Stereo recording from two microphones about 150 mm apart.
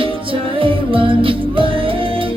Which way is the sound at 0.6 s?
35° right (ahead or behind).